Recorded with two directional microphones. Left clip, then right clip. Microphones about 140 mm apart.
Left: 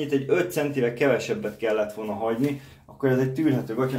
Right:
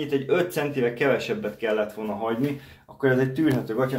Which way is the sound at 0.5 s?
25° left (ahead or behind).